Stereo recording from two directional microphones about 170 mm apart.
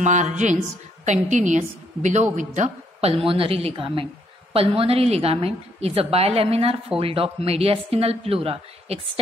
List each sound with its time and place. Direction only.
0.0 s a woman's voice: 45° right (ahead or behind)